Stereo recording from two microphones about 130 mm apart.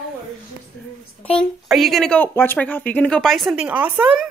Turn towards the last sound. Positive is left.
turn(degrees=-10)  # may be behind; listen again after turning